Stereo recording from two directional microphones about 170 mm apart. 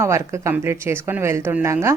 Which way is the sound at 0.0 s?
15° right (ahead or behind).